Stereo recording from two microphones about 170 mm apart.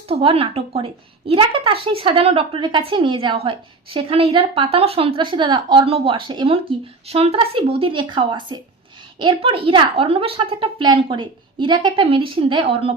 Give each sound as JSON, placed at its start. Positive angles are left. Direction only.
{"t": 0.1, "sound": "a woman's voice", "side_deg": -35}